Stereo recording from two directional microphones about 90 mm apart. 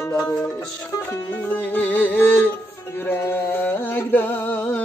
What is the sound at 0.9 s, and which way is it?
Music, 25° left (ahead or behind).